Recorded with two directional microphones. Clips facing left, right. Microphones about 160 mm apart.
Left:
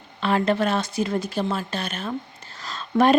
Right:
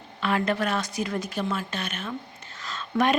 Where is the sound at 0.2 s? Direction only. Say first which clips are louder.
Left 4 dB; 30° left (ahead or behind).